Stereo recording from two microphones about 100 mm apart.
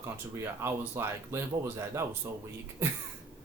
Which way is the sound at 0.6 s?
25° right (ahead or behind).